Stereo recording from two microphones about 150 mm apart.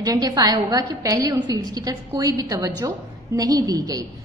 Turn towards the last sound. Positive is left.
turn(degrees=-25)  # may be behind; listen again after turning